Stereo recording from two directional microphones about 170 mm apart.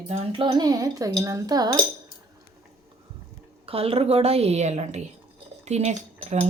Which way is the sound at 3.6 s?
35° right (ahead or behind).